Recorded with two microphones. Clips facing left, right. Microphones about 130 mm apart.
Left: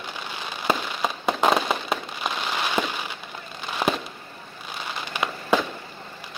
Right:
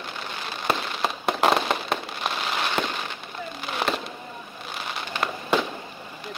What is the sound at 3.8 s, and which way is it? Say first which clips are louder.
Fireworks: left 2 dB; centre (ahead or behind).